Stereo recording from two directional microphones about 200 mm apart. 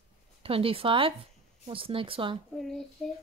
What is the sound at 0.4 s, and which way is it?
Speech, 30° right (ahead or behind).